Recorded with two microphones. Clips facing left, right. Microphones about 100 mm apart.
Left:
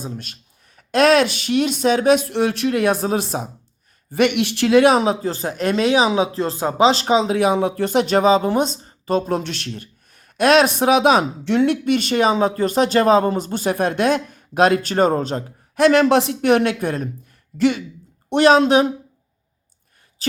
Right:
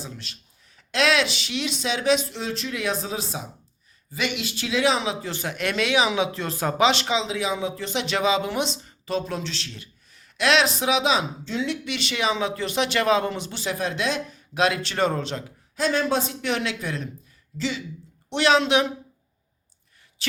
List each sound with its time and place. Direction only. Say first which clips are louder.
0.0 s speech: left 7 dB; 45° left (ahead or behind)
15.7 s speech: left 9 dB; 70° left (ahead or behind)
18.3 s speech: left 7 dB; 45° left (ahead or behind)